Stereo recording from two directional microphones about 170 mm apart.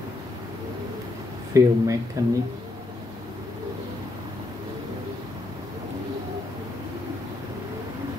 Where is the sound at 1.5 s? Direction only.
20° right (ahead or behind).